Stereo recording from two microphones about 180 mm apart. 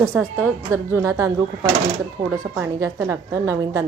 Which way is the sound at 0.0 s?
15° right (ahead or behind).